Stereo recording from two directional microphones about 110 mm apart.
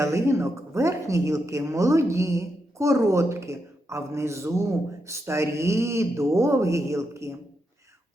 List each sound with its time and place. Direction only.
0.0 s speech: 25° right (ahead or behind)